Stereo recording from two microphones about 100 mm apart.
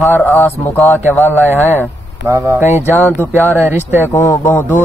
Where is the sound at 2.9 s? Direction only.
20° left (ahead or behind).